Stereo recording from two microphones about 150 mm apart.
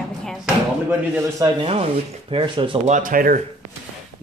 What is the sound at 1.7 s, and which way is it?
Speech, 40° right (ahead or behind).